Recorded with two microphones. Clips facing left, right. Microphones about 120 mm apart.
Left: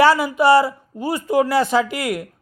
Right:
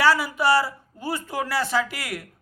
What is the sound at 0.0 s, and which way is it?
A man's voice, 20° left (ahead or behind).